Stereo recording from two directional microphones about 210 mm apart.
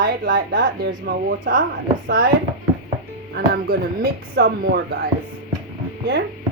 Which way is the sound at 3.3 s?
50° right (ahead or behind).